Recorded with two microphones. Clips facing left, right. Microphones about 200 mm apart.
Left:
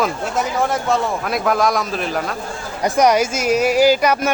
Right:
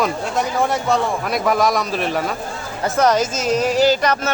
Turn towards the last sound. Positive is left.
turn(degrees=10)  # may be behind; listen again after turning